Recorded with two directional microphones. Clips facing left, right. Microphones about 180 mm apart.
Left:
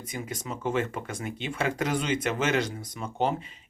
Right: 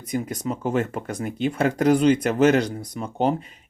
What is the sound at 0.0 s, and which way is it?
Speech, 40° right (ahead or behind).